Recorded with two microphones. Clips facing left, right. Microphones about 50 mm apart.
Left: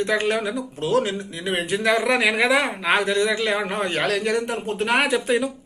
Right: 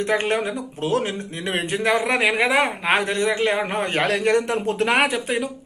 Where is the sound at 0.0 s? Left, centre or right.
Right.